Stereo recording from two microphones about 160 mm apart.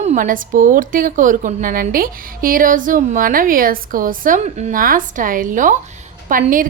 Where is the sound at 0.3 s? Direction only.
55° right (ahead or behind).